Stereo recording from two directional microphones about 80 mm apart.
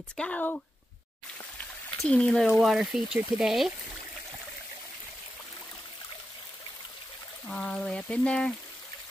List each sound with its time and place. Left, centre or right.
0.2 s speech: centre
2.0 s speech: centre
2.6 s speech: centre
7.4 s speech: centre